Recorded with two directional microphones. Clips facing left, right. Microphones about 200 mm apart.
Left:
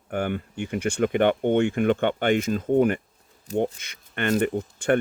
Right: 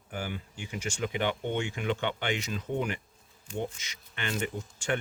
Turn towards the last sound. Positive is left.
turn(degrees=55)  # may be behind; listen again after turning